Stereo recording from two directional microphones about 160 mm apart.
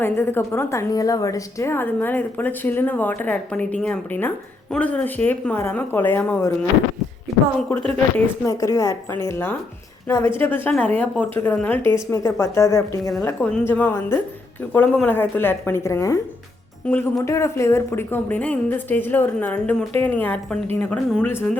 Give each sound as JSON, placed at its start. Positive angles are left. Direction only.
{"t": 0.0, "sound": "a woman's voice", "side_deg": 15}
{"t": 8.1, "sound": "a woman's voice", "side_deg": 20}
{"t": 17.2, "sound": "a woman's voice", "side_deg": 20}